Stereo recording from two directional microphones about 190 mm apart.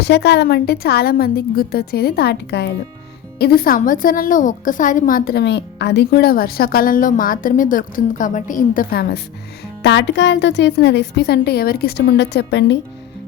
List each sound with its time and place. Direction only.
0.0 s a woman's voice: 60° left (ahead or behind)
9.8 s speech: 65° left (ahead or behind)